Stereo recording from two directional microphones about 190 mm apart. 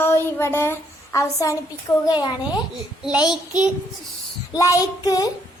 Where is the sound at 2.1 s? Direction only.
20° left (ahead or behind).